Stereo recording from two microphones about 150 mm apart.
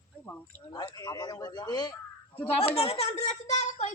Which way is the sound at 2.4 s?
40° left (ahead or behind).